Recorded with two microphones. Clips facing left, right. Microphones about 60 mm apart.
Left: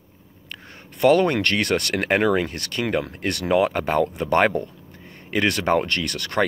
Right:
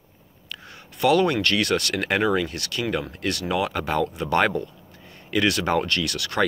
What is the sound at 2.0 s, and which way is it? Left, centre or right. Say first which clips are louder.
Speech: left 3 dB; left.